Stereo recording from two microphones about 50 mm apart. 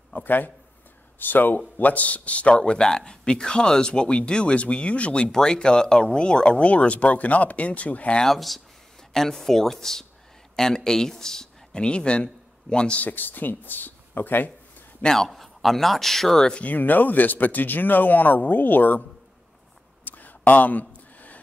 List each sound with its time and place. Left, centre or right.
0.1 s a man's voice: left
8.2 s speech: centre
13.0 s speech: left
15.0 s speech: centre
16.6 s speech: left
20.1 s a sound: left